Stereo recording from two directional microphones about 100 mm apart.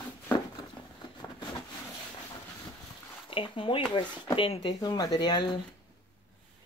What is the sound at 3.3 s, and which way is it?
Speech, 60° left (ahead or behind).